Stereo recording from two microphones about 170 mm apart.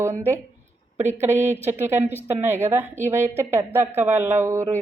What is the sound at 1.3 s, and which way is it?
A woman's voice, 15° right (ahead or behind).